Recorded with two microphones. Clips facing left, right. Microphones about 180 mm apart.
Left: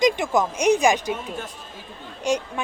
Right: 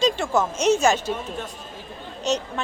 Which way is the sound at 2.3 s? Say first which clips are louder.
Left 1 dB; 10° left (ahead or behind).